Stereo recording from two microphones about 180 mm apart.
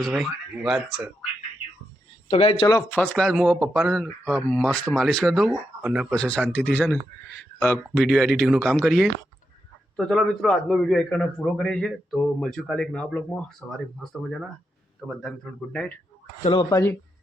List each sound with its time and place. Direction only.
0.0 s a man's voice: centre (ahead or behind)
2.3 s speech: 30° left (ahead or behind)
3.0 s a man's voice: 5° left (ahead or behind)
16.5 s speech: 20° left (ahead or behind)